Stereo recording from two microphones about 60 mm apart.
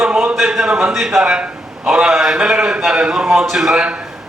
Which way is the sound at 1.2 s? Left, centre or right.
Centre.